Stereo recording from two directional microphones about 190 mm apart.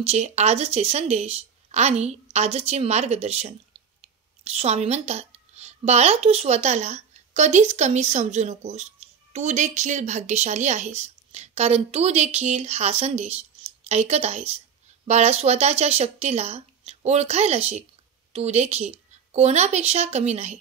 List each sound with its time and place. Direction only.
0.0 s a woman's voice: 35° right (ahead or behind)